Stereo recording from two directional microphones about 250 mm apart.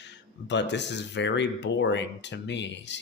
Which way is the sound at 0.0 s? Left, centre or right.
Left.